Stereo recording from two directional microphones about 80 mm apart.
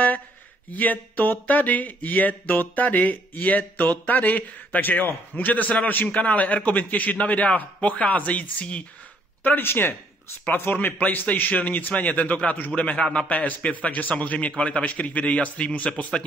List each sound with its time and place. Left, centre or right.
0.7 s a man's voice: left